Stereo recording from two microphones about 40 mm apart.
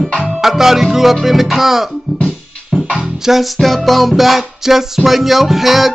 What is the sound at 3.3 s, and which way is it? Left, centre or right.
Music, centre.